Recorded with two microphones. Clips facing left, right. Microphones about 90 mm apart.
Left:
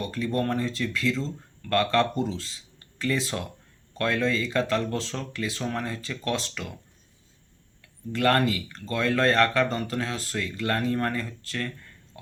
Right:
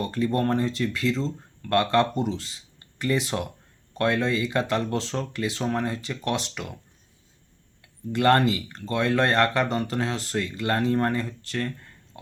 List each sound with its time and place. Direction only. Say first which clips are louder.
0.0 s speech: right 3 dB; 25° right (ahead or behind)
7.8 s speech: right 2 dB; 20° right (ahead or behind)